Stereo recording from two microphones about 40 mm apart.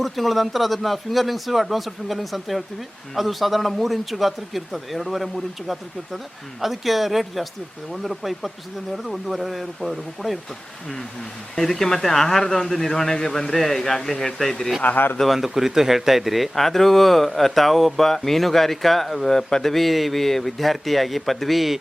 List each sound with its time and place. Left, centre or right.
0.0 s speech: centre
11.5 s speech: centre
14.9 s speech: left
15.4 s speech: centre
19.7 s speech: centre